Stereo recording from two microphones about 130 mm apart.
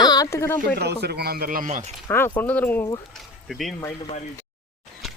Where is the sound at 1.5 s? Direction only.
80° right.